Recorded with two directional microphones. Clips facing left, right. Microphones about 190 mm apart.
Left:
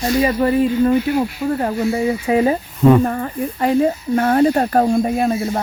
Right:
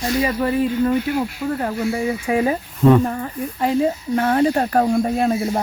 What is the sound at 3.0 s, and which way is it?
Speech, 65° left (ahead or behind).